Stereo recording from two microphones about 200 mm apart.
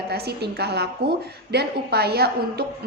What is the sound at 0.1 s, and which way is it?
A woman's voice, 55° right (ahead or behind).